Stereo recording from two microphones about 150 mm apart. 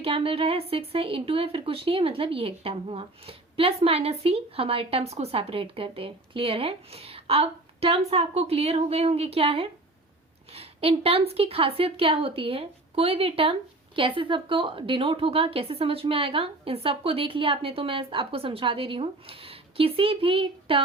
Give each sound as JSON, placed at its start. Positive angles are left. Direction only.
{"t": 0.0, "sound": "a woman's voice", "side_deg": -40}